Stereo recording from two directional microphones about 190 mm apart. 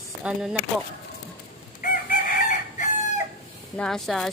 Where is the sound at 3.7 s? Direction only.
5° left (ahead or behind).